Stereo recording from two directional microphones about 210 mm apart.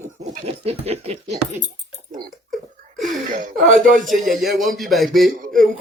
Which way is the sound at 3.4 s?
35° right (ahead or behind).